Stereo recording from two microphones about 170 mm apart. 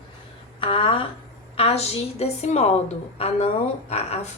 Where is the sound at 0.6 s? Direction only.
30° left (ahead or behind).